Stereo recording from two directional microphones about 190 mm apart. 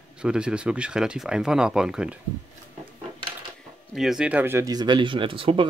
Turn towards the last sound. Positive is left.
turn(degrees=-30)  # may be behind; listen again after turning